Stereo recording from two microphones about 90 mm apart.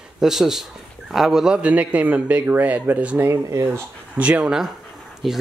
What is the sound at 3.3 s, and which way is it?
Speech, 35° right (ahead or behind).